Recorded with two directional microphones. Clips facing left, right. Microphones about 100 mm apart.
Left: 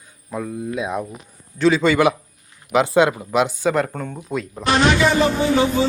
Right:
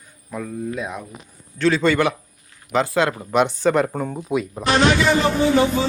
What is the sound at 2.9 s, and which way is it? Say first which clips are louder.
Speech: left 4 dB; 15° left (ahead or behind).